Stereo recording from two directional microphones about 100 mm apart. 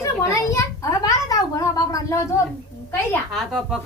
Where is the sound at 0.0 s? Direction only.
30° left (ahead or behind).